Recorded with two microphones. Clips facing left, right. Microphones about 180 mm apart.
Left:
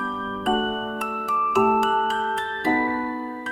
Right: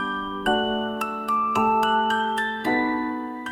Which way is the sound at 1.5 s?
Centre (ahead or behind).